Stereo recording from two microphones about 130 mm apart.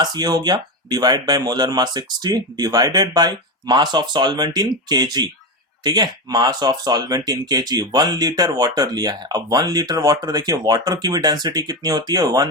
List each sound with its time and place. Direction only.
0.0 s speech: 35° right (ahead or behind)